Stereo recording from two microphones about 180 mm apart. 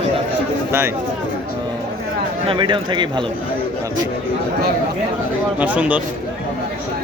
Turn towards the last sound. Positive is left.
turn(degrees=-5)  # may be behind; listen again after turning